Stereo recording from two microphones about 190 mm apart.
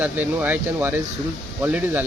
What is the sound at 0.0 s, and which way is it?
Speech, 10° right (ahead or behind).